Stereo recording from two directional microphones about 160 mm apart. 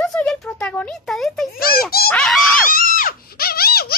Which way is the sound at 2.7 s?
60° left (ahead or behind).